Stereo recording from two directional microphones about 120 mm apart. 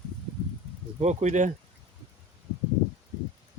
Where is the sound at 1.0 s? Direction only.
70° right (ahead or behind).